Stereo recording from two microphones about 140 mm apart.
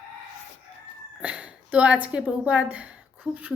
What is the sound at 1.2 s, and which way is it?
A woman's voice, 10° right (ahead or behind).